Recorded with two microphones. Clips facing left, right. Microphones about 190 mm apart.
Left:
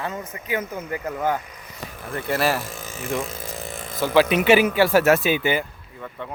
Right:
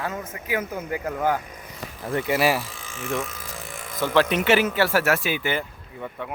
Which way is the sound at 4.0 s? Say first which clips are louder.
Left 3 dB; 5° left (ahead or behind).